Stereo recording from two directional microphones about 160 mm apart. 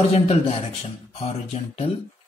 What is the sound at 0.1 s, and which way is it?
A man's voice, 40° left (ahead or behind).